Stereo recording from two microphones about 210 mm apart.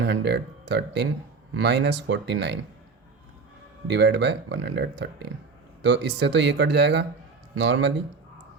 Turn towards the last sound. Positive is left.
turn(degrees=-55)  # may be behind; listen again after turning